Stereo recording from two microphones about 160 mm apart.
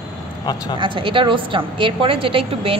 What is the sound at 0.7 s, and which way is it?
A woman's voice, 30° right (ahead or behind).